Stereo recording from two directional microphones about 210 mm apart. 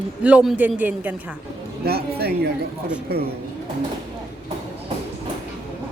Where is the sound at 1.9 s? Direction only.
50° right (ahead or behind).